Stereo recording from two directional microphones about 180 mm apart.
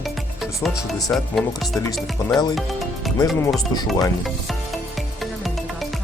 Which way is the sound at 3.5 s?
20° left (ahead or behind).